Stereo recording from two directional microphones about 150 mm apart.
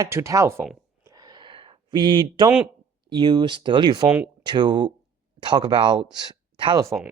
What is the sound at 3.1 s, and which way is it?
Speech, 30° right (ahead or behind).